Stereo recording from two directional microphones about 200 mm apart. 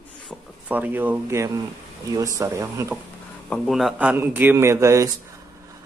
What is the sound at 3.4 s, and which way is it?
Speech, centre (ahead or behind).